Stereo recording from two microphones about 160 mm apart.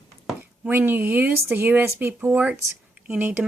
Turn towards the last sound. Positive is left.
turn(degrees=-10)  # may be behind; listen again after turning